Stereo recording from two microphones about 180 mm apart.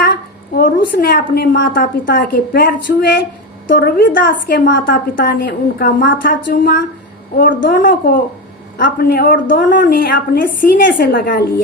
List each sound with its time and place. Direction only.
0.0 s a woman's voice: 60° left (ahead or behind)